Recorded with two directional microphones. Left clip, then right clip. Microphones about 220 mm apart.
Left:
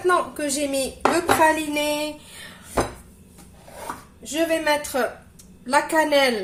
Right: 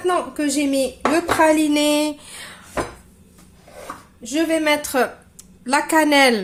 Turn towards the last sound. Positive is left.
turn(degrees=-45)  # may be behind; listen again after turning